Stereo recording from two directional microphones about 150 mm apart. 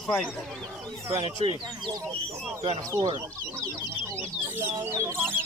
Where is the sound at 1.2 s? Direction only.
35° right (ahead or behind).